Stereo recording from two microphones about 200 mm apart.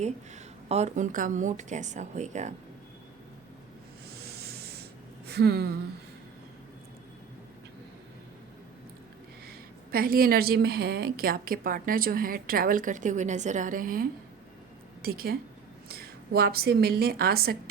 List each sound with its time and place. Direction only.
0.7 s speech: 35° right (ahead or behind)
4.2 s a sound: 50° right (ahead or behind)
5.3 s a woman's voice: 55° right (ahead or behind)
9.9 s a woman's voice: 45° right (ahead or behind)